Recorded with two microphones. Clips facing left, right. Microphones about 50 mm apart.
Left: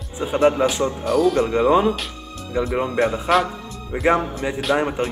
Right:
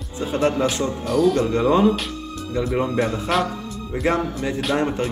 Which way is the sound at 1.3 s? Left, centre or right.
Centre.